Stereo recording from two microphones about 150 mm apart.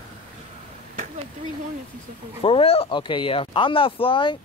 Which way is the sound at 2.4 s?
40° left (ahead or behind).